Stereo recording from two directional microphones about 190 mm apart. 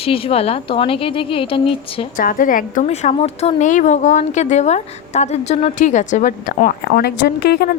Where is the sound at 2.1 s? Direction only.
45° left (ahead or behind).